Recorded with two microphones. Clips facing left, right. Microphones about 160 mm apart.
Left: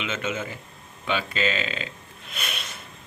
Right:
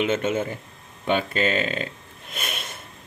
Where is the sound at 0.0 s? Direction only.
50° right (ahead or behind).